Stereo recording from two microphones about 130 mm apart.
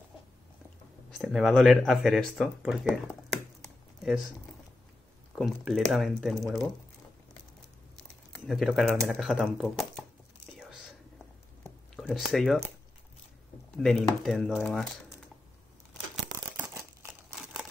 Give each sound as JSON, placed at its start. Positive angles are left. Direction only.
{"t": 1.1, "sound": "speech", "side_deg": 0}
{"t": 5.3, "sound": "speech", "side_deg": 0}
{"t": 8.5, "sound": "speech", "side_deg": 0}
{"t": 12.0, "sound": "speech", "side_deg": 0}
{"t": 13.7, "sound": "speech", "side_deg": 5}
{"t": 16.5, "sound": "a sound", "side_deg": -20}